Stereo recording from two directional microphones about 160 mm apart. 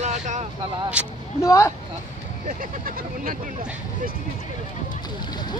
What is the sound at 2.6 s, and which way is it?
Speech, 60° right (ahead or behind).